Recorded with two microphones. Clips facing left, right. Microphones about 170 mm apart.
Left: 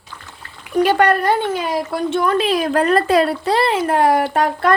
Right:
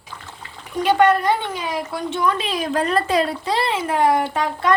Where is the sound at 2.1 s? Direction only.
50° left (ahead or behind).